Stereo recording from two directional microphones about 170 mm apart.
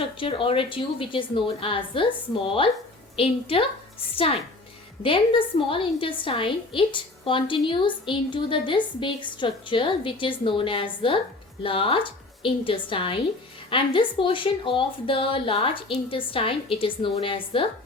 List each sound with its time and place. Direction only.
0.0 s a woman's voice: 30° left (ahead or behind)
5.0 s a woman's voice: 30° left (ahead or behind)